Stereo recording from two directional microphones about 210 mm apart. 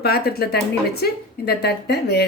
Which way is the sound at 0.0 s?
50° left (ahead or behind).